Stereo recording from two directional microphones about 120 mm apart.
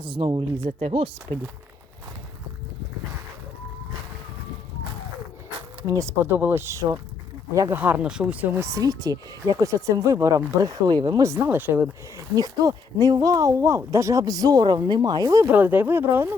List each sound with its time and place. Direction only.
0.0 s speech: 45° right (ahead or behind)
0.8 s speech: 60° right (ahead or behind)
5.8 s speech: 25° right (ahead or behind)
7.8 s speech: 15° right (ahead or behind); by 15.4 s 30° right (ahead or behind)
15.4 s speech: 15° right (ahead or behind)